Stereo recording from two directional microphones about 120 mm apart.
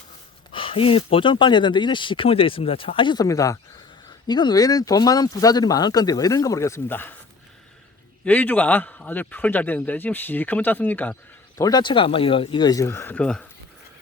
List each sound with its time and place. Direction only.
0.5 s speech: 50° left (ahead or behind)
3.2 s speech: 30° left (ahead or behind)
8.2 s a man's voice: 15° left (ahead or behind)
11.6 s speech: 40° left (ahead or behind)
12.8 s a man's voice: 20° left (ahead or behind)